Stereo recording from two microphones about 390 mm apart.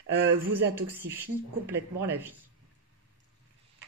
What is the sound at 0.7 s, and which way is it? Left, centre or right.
Speech, centre.